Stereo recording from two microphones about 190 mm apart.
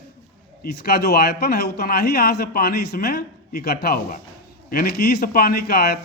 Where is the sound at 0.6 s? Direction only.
55° left (ahead or behind).